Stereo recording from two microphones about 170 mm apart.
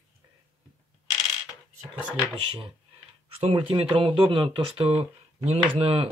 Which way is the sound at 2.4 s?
30° right (ahead or behind).